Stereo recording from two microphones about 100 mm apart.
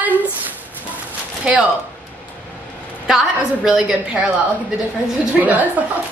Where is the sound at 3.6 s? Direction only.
5° right (ahead or behind).